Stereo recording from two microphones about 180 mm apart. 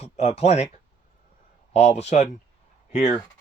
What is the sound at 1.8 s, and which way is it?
Speech, 40° left (ahead or behind).